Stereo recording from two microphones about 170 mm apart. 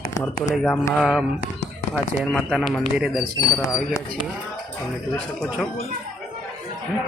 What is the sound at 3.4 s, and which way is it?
Speech, 20° left (ahead or behind).